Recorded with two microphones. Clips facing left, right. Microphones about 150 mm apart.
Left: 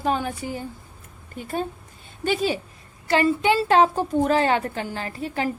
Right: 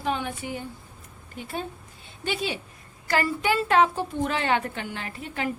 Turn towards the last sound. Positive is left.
turn(degrees=35)  # may be behind; listen again after turning